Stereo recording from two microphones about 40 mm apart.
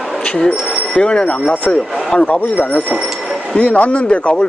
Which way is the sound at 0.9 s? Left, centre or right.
Left.